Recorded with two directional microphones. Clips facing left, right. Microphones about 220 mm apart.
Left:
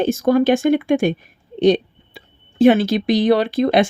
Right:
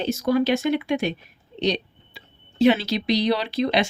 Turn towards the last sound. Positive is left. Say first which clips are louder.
# left 7 dB
turn(degrees=50)  # may be behind; listen again after turning